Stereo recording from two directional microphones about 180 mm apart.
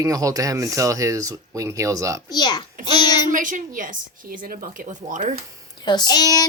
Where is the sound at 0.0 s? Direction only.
20° right (ahead or behind).